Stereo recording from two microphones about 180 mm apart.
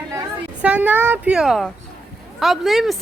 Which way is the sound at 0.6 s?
10° right (ahead or behind).